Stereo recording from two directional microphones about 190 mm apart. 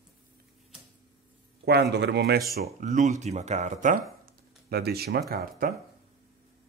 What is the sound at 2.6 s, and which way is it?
Speech, 40° right (ahead or behind).